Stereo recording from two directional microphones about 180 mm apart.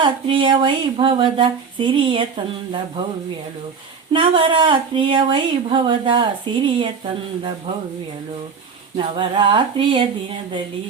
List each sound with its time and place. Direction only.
0.0 s speech: 25° right (ahead or behind)
4.1 s speech: 30° right (ahead or behind)
9.0 s speech: 25° right (ahead or behind)